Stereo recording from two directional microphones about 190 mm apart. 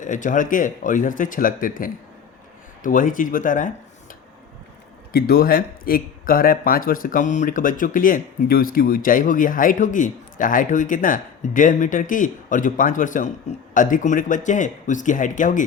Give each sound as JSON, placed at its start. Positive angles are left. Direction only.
{"t": 0.0, "sound": "a man's voice", "side_deg": 45}
{"t": 5.1, "sound": "a man's voice", "side_deg": 50}